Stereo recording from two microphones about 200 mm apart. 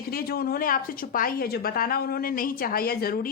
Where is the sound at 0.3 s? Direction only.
50° left (ahead or behind).